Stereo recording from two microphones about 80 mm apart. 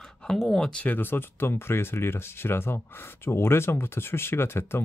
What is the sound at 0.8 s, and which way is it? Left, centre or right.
Speech, left.